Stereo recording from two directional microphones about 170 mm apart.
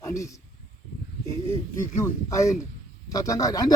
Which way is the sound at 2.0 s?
20° left (ahead or behind).